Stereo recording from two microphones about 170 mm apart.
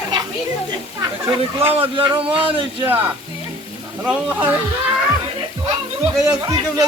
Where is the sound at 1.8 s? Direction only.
30° right (ahead or behind).